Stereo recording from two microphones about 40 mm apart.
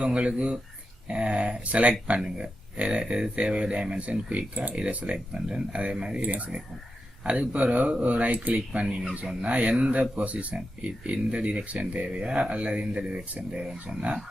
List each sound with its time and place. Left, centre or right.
0.0 s speech: right
6.2 s speech: right